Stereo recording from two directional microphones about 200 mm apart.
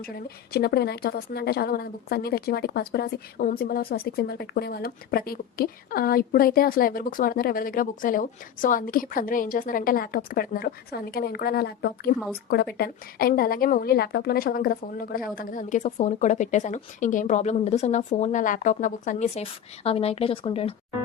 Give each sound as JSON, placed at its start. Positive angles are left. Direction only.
{"t": 0.0, "sound": "a woman's voice", "side_deg": 50}